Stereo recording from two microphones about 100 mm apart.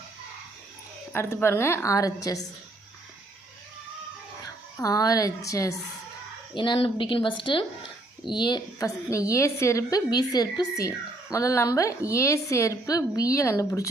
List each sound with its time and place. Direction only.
1.1 s a woman's voice: 25° left (ahead or behind)
4.8 s a woman's voice: 35° left (ahead or behind)
6.5 s speech: 50° left (ahead or behind)
6.7 s speech: 60° left (ahead or behind)
9.0 s a woman's voice: 30° left (ahead or behind)
10.1 s a woman's voice: 40° left (ahead or behind)